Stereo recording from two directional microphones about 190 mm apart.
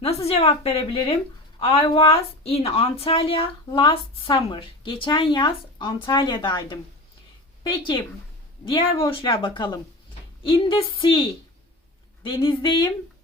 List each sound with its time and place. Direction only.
0.0 s a woman's voice: 35° left (ahead or behind)
8.6 s a woman's voice: 30° left (ahead or behind)